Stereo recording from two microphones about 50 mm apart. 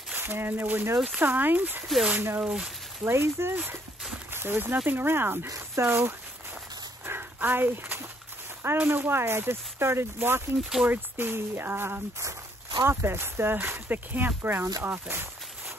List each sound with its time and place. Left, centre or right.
0.1 s speech: right
3.0 s speech: right
7.1 s a sound: right
8.7 s speech: right
10.8 s speech: right